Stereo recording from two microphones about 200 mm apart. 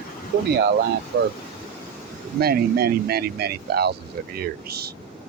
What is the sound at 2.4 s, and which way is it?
Speech, 50° right (ahead or behind).